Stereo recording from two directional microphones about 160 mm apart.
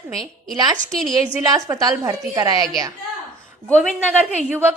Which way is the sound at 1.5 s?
20° right (ahead or behind).